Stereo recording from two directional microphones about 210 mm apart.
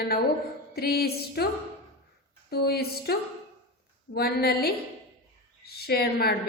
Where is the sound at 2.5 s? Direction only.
50° left (ahead or behind).